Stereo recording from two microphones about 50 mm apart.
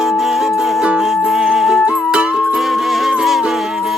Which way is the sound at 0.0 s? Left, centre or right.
Centre.